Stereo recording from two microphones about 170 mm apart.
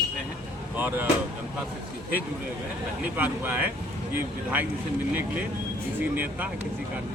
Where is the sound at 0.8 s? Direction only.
10° right (ahead or behind).